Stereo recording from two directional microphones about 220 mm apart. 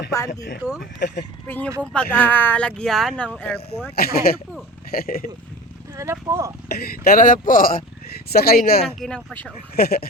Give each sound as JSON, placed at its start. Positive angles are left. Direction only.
{"t": 0.8, "sound": "speech", "side_deg": 50}
{"t": 1.5, "sound": "speech", "side_deg": 10}
{"t": 3.9, "sound": "speech", "side_deg": 45}
{"t": 5.9, "sound": "speech", "side_deg": -15}
{"t": 6.7, "sound": "speech", "side_deg": 45}
{"t": 9.0, "sound": "speech", "side_deg": 5}
{"t": 9.7, "sound": "speech", "side_deg": 45}